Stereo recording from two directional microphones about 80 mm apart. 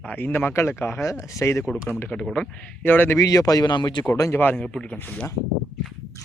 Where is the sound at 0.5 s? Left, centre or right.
Left.